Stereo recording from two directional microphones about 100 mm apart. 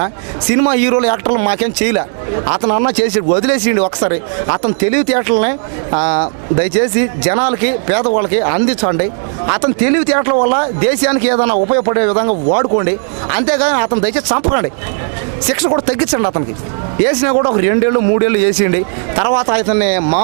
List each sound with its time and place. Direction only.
0.5 s speech: 20° right (ahead or behind)
5.9 s speech: 30° right (ahead or behind)
13.3 s speech: 15° right (ahead or behind)